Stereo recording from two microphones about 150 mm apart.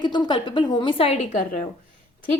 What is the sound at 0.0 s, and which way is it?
A woman's voice, 30° left (ahead or behind).